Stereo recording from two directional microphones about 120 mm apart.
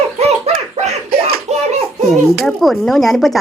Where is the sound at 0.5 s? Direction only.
60° right (ahead or behind).